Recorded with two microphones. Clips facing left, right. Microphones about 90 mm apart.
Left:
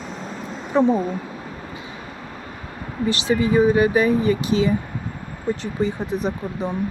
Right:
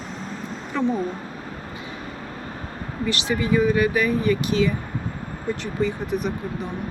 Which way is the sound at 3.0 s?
30° left (ahead or behind).